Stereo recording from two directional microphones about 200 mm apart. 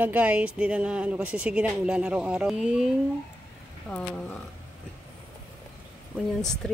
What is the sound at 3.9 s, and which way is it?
Speech, 5° left (ahead or behind).